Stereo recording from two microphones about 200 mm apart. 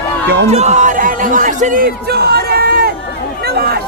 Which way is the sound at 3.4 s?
50° right (ahead or behind).